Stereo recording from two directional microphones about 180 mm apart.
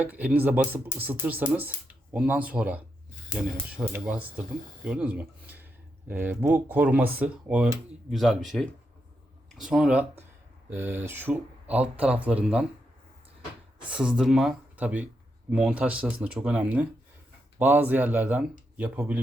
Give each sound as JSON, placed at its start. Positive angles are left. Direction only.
{"t": 0.0, "sound": "speech", "side_deg": -10}
{"t": 13.9, "sound": "speech", "side_deg": -5}